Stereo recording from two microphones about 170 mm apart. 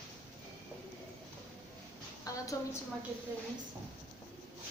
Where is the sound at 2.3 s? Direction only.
20° left (ahead or behind).